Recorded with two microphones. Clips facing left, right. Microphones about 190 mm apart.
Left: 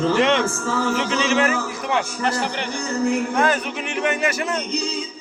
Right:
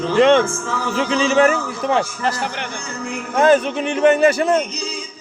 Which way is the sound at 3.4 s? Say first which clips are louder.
Right 7 dB; 25° right (ahead or behind).